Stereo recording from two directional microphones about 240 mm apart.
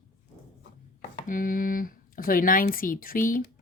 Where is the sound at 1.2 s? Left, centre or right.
Left.